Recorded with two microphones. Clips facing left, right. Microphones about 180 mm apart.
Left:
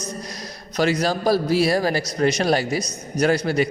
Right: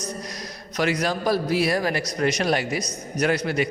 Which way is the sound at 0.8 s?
30° left (ahead or behind).